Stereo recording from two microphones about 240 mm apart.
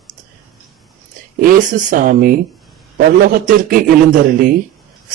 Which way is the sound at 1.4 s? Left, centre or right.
Right.